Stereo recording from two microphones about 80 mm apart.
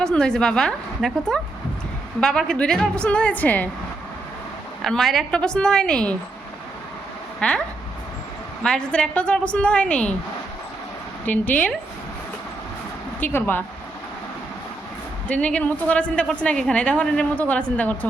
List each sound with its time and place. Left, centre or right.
0.0 s a woman's voice: centre
4.8 s a woman's voice: centre
7.3 s speech: centre
8.6 s a woman's voice: centre
11.3 s a woman's voice: left
13.1 s speech: left
15.3 s a woman's voice: centre